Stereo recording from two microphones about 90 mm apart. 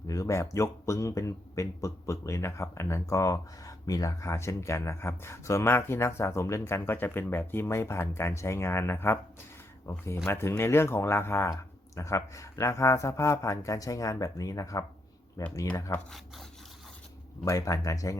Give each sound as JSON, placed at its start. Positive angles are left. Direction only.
{"t": 0.1, "sound": "a man's voice", "side_deg": 35}
{"t": 16.0, "sound": "speech", "side_deg": 0}
{"t": 17.4, "sound": "a man's voice", "side_deg": 35}